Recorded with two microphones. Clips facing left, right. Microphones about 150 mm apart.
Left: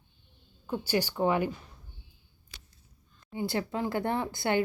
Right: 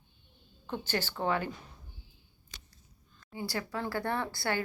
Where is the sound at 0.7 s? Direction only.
10° left (ahead or behind).